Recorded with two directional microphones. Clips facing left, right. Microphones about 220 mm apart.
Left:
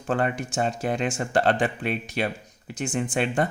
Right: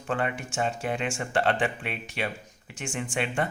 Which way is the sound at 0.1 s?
40° left (ahead or behind).